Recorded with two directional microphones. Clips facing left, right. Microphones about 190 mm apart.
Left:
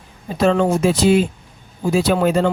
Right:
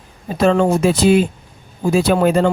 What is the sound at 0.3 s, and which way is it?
Speech, 50° right (ahead or behind).